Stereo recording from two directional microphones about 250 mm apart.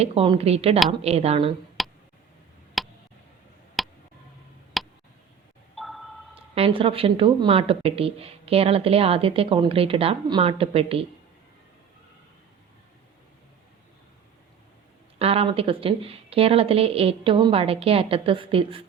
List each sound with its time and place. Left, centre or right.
0.0 s a woman's voice: right
1.8 s tick: centre
3.8 s a sound: centre
6.5 s a woman's voice: right
15.2 s a woman's voice: right